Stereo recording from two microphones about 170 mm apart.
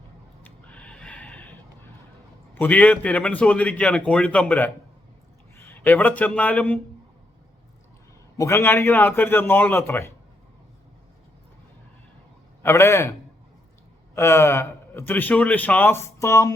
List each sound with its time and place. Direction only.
0.4 s neigh: 5° left (ahead or behind)
2.6 s a man's voice: 10° left (ahead or behind)
8.4 s a man's voice: 15° left (ahead or behind)
12.6 s a man's voice: 15° left (ahead or behind)
14.2 s a man's voice: 15° left (ahead or behind)